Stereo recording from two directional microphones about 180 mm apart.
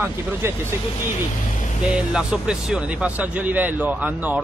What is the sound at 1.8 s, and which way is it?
Speech, 5° right (ahead or behind).